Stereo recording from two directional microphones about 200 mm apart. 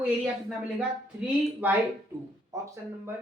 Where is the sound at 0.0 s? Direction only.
5° right (ahead or behind).